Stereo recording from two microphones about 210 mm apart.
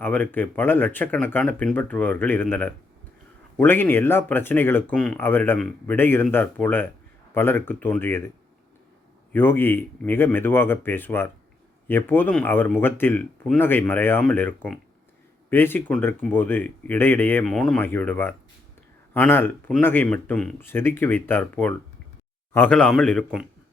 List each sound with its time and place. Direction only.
0.0 s speech: 10° left (ahead or behind)
9.3 s a man's voice: 10° left (ahead or behind)